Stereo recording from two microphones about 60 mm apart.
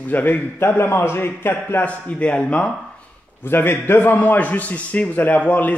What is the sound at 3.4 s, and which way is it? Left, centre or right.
A man's voice, left.